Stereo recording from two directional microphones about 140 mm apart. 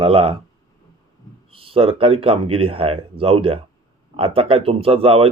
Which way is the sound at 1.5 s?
40° right (ahead or behind).